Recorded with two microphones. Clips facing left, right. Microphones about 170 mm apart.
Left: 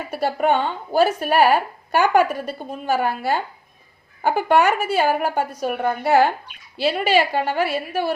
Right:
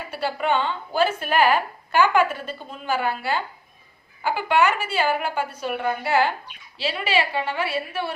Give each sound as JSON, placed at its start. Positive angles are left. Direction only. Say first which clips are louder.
{"t": 0.2, "sound": "a woman's voice", "louder": "left 4 dB", "side_deg": 50}